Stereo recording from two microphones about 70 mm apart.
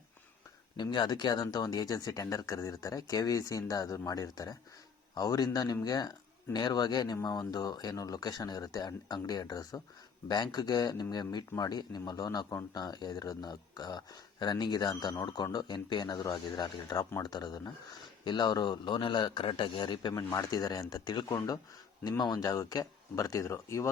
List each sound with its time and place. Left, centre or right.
0.8 s speech: left
10.2 s speech: left
11.1 s speech: left
12.7 s speech: left
17.2 s speech: left
18.3 s speech: left
20.9 s speech: left
21.2 s speech: left